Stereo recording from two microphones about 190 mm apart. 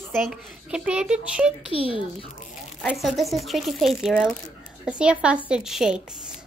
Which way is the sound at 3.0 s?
Centre (ahead or behind).